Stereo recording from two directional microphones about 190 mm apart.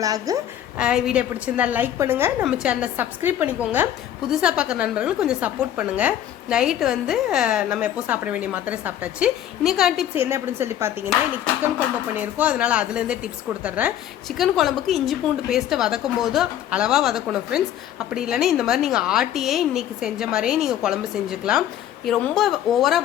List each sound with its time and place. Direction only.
0.0 s a woman's voice: 20° right (ahead or behind)
0.8 s a woman's voice: 5° right (ahead or behind)
10.2 s a woman's voice: 15° right (ahead or behind)
12.1 s a woman's voice: 10° right (ahead or behind)